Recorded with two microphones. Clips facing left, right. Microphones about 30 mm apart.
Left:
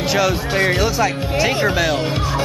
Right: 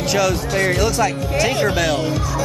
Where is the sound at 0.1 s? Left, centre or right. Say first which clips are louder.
Even; centre.